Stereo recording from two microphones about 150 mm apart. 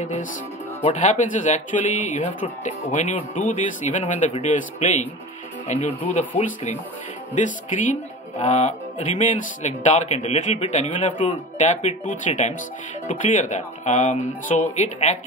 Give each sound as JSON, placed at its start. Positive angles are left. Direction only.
{"t": 0.0, "sound": "speech", "side_deg": 60}